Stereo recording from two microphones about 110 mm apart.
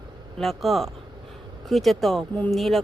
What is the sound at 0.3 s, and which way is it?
Speech, centre (ahead or behind).